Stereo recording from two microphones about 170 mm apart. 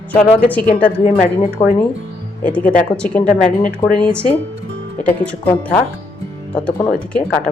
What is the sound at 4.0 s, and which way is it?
Speech, 5° left (ahead or behind).